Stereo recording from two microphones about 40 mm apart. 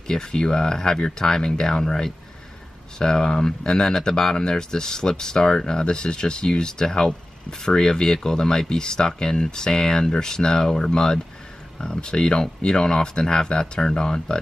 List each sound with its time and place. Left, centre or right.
0.1 s speech: centre